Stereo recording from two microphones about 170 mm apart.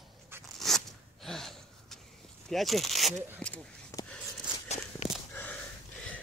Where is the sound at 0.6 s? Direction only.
Centre (ahead or behind).